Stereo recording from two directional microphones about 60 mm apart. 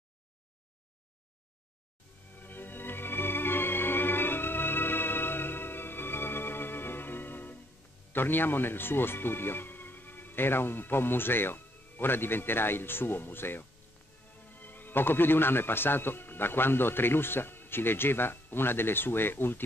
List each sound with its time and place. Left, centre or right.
2.3 s music: left
8.1 s a man's voice: left